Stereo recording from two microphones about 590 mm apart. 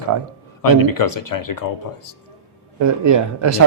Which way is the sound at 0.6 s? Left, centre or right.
Left.